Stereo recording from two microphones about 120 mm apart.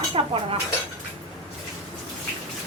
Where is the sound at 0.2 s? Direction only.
45° right (ahead or behind).